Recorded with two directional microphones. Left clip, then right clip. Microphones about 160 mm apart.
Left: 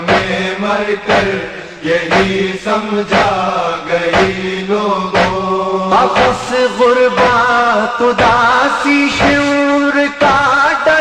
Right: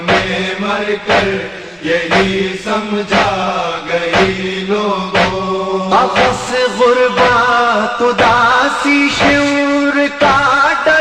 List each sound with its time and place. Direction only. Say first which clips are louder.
0.7 s mantra: even; 30° left (ahead or behind)
5.9 s music: even; 30° left (ahead or behind)